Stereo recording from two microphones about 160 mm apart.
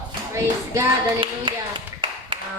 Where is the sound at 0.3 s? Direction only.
15° right (ahead or behind).